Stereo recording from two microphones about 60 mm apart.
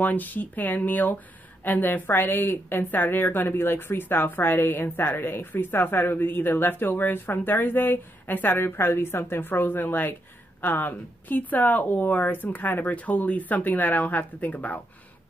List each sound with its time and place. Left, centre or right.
0.0 s a woman's voice: left